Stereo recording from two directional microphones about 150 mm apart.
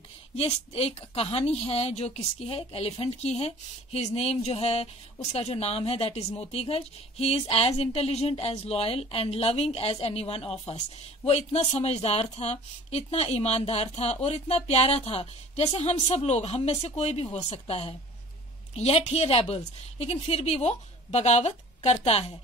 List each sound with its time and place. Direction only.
0.4 s a woman's voice: 40° left (ahead or behind)